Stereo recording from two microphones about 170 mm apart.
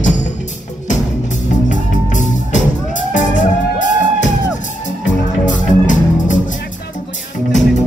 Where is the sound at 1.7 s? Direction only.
45° left (ahead or behind).